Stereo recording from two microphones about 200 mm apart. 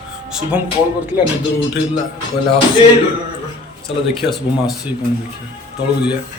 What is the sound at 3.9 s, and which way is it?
Speech, 30° left (ahead or behind).